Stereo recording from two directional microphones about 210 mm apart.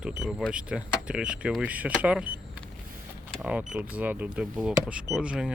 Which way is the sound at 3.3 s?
5° right (ahead or behind).